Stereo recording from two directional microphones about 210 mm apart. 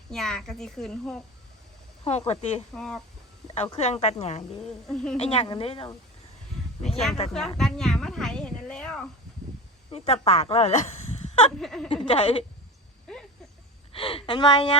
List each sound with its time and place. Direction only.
0.1 s speech: centre (ahead or behind)
2.0 s a woman's voice: 30° left (ahead or behind)
2.7 s speech: 5° left (ahead or behind)
3.5 s a woman's voice: 30° left (ahead or behind)
4.6 s speech: 5° left (ahead or behind)
5.1 s a woman's voice: 30° left (ahead or behind)
7.3 s speech: centre (ahead or behind)
9.9 s speech: 30° left (ahead or behind)
11.6 s speech: centre (ahead or behind)
12.0 s a woman's voice: 30° left (ahead or behind)
13.1 s a sound: 5° left (ahead or behind)
13.9 s speech: 25° left (ahead or behind)